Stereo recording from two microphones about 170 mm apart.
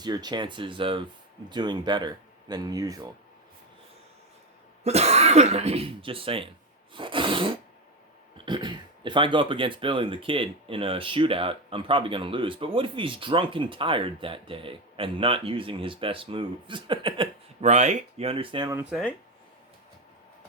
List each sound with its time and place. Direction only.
0.0 s speech: 25° right (ahead or behind)
4.8 s speech: 40° right (ahead or behind)
17.6 s speech: 40° right (ahead or behind)
18.7 s speech: 10° right (ahead or behind)